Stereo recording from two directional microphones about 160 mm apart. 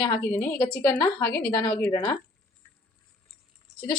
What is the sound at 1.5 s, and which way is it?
Speech, 25° left (ahead or behind).